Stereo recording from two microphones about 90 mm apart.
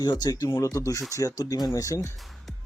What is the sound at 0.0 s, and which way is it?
Speech, 50° left (ahead or behind).